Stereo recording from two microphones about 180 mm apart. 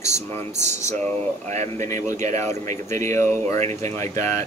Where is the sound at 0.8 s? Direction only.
15° left (ahead or behind).